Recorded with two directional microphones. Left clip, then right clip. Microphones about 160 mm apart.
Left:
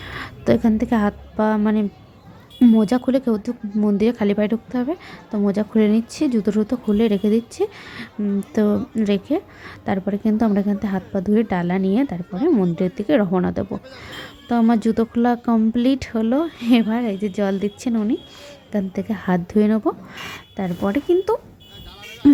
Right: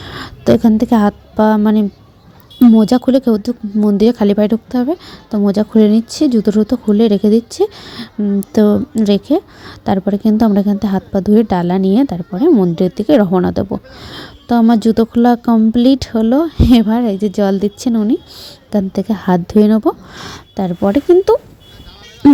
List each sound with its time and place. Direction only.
0.0 s a woman's voice: 35° right (ahead or behind)